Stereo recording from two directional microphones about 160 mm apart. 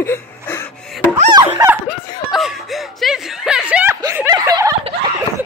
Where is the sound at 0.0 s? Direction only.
15° left (ahead or behind).